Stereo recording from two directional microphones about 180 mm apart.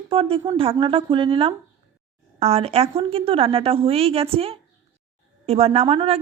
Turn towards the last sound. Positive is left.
turn(degrees=-30)  # may be behind; listen again after turning